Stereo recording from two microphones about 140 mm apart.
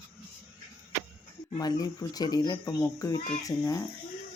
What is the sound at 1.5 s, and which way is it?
Speech, 25° left (ahead or behind).